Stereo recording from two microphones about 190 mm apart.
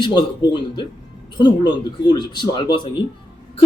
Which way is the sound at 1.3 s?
25° left (ahead or behind).